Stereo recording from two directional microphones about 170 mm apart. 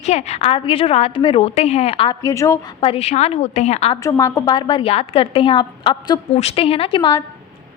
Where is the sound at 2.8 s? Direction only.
35° left (ahead or behind).